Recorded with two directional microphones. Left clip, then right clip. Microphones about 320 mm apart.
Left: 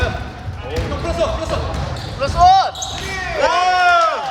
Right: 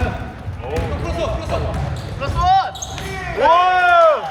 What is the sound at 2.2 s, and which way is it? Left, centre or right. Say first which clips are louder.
Basketball bounce: left 4 dB; centre.